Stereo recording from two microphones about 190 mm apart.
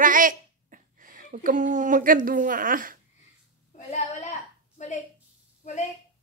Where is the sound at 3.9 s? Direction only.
40° left (ahead or behind).